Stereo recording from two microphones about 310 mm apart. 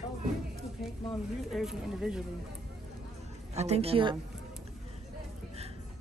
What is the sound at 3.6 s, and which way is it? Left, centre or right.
Speech, centre.